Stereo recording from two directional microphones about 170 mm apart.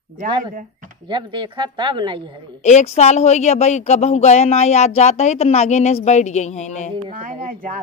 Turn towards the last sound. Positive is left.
turn(degrees=-50)  # may be behind; listen again after turning